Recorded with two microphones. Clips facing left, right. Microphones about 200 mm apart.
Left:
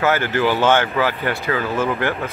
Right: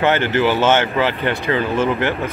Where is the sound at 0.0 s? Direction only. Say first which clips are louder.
Right 2 dB; 20° right (ahead or behind).